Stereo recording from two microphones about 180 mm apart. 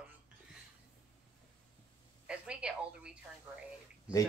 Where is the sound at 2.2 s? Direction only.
5° right (ahead or behind).